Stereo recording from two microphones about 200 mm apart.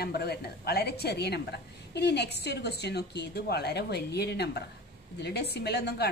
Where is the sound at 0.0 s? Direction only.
50° left (ahead or behind).